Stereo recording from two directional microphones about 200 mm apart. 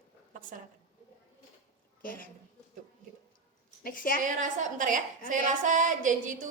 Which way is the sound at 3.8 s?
45° left (ahead or behind).